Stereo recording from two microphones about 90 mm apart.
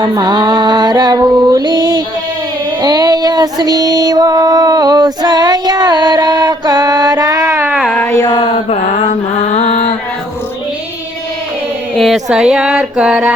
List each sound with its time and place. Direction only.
0.0 s female singing: 50° right (ahead or behind)
2.8 s music: 45° right (ahead or behind); by 7.7 s 30° right (ahead or behind)
8.0 s a sound: 30° left (ahead or behind)
11.9 s music: centre (ahead or behind)